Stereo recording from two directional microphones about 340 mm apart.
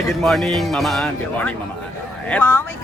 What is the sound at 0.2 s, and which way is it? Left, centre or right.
Speech, centre.